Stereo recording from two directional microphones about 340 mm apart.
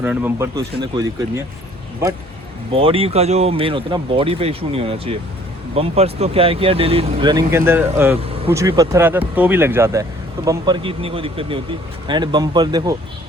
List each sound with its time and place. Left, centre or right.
0.0 s speech: centre
2.7 s speech: centre